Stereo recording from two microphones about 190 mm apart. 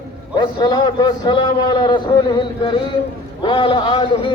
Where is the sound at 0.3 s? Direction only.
25° left (ahead or behind).